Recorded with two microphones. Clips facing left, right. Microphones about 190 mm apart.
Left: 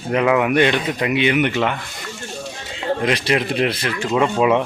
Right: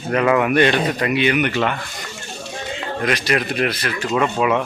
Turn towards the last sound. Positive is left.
turn(degrees=25)  # may be behind; listen again after turning